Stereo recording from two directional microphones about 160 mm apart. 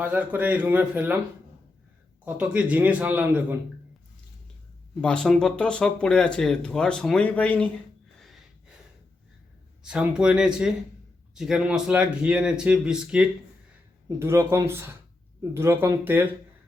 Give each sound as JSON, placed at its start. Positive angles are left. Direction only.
{"t": 0.0, "sound": "a man's voice", "side_deg": -10}
{"t": 2.2, "sound": "a man's voice", "side_deg": -10}
{"t": 4.9, "sound": "speech", "side_deg": 5}
{"t": 9.8, "sound": "speech", "side_deg": -5}
{"t": 14.2, "sound": "a man's voice", "side_deg": -15}